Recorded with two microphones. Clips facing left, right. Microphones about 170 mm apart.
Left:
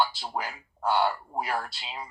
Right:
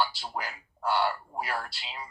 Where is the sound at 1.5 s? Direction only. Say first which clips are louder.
Left 3 dB; 20° left (ahead or behind).